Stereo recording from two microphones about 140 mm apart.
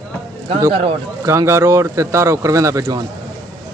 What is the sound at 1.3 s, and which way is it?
Speech, 20° right (ahead or behind).